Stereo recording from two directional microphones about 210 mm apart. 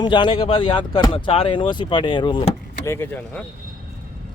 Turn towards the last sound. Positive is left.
turn(degrees=10)  # may be behind; listen again after turning